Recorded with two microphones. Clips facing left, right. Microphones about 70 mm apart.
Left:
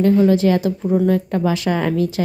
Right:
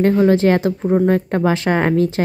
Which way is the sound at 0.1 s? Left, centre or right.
Right.